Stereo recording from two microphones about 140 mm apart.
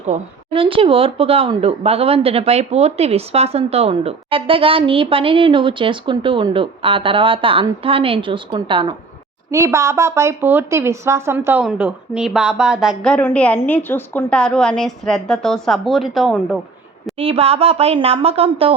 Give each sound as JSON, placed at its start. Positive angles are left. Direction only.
{"t": 0.1, "sound": "speech", "side_deg": -50}
{"t": 0.5, "sound": "speech", "side_deg": -40}
{"t": 9.5, "sound": "a woman's voice", "side_deg": -20}
{"t": 13.0, "sound": "a woman's voice", "side_deg": 10}
{"t": 17.2, "sound": "speech", "side_deg": -40}